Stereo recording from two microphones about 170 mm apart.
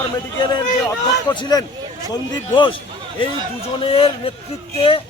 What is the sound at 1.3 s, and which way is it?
Speech, 20° left (ahead or behind).